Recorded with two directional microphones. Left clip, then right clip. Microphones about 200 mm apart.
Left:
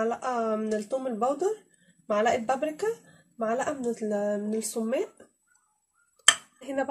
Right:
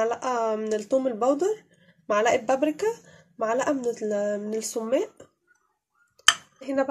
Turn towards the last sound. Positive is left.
turn(degrees=-10)  # may be behind; listen again after turning